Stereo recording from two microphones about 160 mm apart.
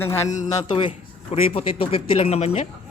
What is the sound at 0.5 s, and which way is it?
A man's voice, 30° left (ahead or behind).